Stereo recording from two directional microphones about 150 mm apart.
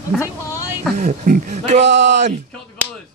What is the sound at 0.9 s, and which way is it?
Speech, 55° right (ahead or behind).